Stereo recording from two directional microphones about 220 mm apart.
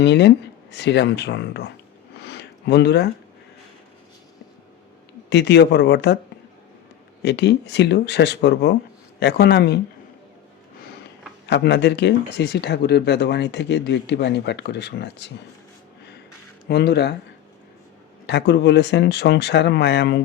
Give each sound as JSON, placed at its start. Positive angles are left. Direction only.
{"t": 0.0, "sound": "speech", "side_deg": 50}
{"t": 2.1, "sound": "a sound", "side_deg": 50}
{"t": 5.3, "sound": "speech", "side_deg": 50}
{"t": 7.2, "sound": "speech", "side_deg": 50}
{"t": 11.4, "sound": "speech", "side_deg": 50}
{"t": 16.6, "sound": "speech", "side_deg": 50}
{"t": 18.3, "sound": "speech", "side_deg": 50}